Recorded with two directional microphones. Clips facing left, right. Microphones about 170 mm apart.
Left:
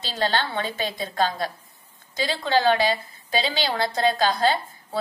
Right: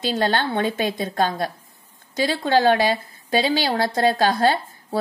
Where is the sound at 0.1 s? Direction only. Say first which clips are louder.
Right 2 dB; 55° right (ahead or behind).